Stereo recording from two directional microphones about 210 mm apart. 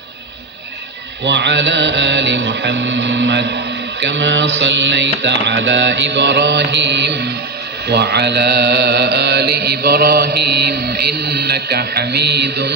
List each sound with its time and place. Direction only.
1.2 s music: 60° right (ahead or behind)
7.9 s mantra: 55° right (ahead or behind)